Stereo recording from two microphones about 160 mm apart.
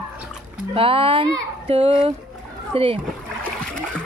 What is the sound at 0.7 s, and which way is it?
A woman's voice, 35° right (ahead or behind).